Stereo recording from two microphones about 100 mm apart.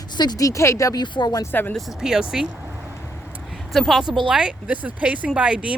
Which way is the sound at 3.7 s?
Centre (ahead or behind).